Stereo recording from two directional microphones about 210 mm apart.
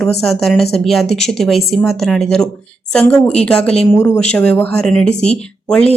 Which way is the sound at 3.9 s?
15° left (ahead or behind).